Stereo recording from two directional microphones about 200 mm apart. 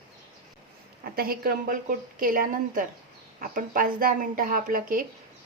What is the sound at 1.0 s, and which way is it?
A woman's voice, 50° right (ahead or behind).